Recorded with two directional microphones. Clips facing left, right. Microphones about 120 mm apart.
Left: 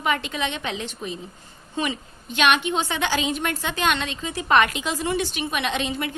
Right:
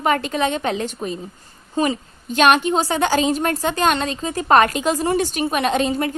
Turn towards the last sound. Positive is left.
turn(degrees=-40)  # may be behind; listen again after turning